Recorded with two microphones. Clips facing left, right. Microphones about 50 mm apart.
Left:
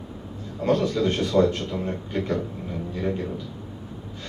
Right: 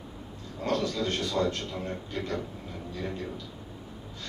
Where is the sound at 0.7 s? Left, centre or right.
Left.